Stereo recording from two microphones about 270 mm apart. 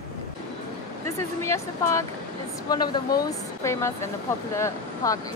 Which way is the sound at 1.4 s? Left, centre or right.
Centre.